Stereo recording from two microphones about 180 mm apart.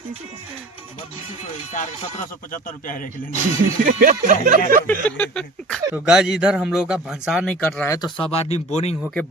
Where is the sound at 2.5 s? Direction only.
45° left (ahead or behind).